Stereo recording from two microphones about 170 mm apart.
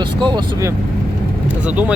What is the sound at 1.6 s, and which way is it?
Speech, 10° right (ahead or behind).